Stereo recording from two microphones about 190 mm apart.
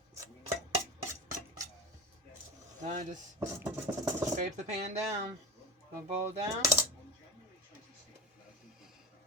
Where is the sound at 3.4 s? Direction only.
10° right (ahead or behind).